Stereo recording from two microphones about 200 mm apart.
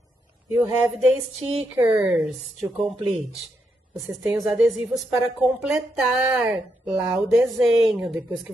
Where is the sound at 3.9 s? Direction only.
15° right (ahead or behind).